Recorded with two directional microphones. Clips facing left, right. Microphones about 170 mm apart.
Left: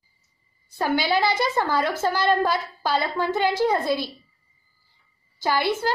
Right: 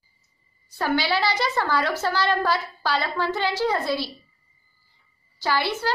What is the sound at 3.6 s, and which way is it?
Speech, 15° left (ahead or behind).